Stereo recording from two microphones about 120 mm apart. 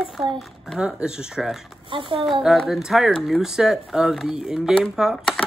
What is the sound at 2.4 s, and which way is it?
Speech, centre (ahead or behind).